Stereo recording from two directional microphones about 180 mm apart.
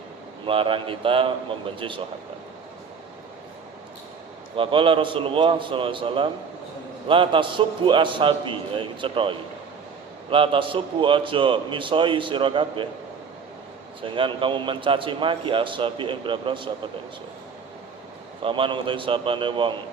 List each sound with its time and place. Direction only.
0.4 s a man's voice: 30° right (ahead or behind)
4.5 s a man's voice: 30° right (ahead or behind)
14.0 s a man's voice: 30° right (ahead or behind)
18.4 s a man's voice: 30° right (ahead or behind)